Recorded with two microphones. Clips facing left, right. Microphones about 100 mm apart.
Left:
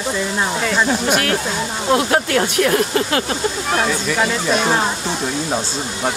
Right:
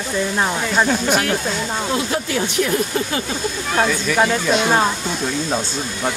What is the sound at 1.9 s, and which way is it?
Speech, 60° left (ahead or behind).